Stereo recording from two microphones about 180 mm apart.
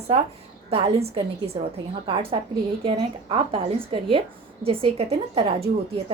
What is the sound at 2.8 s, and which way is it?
A woman's voice, 30° right (ahead or behind).